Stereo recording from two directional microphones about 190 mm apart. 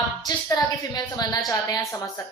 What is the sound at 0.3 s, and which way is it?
A man's voice, 20° left (ahead or behind).